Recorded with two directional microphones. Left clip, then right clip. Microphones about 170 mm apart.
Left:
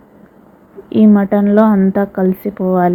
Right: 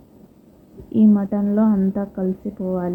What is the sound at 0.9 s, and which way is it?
A woman's voice, 40° left (ahead or behind).